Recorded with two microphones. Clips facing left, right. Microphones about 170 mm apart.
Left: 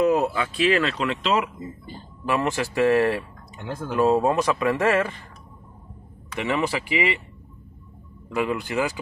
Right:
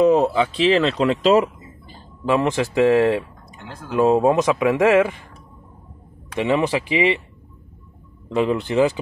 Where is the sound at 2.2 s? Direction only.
15° right (ahead or behind).